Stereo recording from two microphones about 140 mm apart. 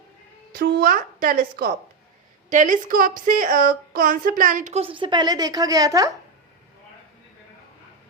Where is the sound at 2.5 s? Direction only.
65° right (ahead or behind); by 6.1 s 25° right (ahead or behind).